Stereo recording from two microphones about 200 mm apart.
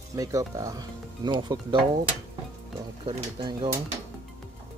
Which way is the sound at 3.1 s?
20° right (ahead or behind).